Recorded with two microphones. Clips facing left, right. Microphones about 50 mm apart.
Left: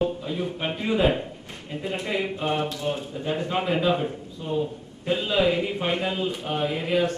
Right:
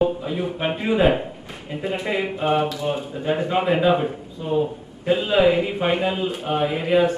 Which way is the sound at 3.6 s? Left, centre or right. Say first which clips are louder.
Right 5 dB; right.